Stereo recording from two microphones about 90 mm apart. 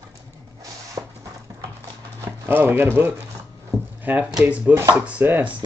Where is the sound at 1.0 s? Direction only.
45° right (ahead or behind).